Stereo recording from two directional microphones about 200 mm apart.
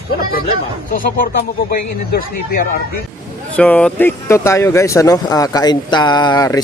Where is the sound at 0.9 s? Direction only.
45° left (ahead or behind).